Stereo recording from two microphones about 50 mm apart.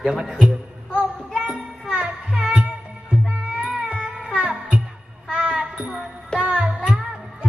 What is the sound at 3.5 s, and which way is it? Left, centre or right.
Music, right.